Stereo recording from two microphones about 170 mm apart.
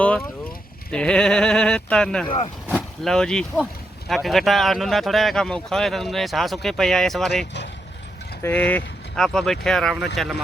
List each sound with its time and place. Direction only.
0.0 s vehicle: 10° left (ahead or behind)
0.9 s speech: 5° left (ahead or behind)
2.2 s speech: 35° left (ahead or behind)
2.6 s vehicle: 5° right (ahead or behind)
3.1 s speech: 5° left (ahead or behind)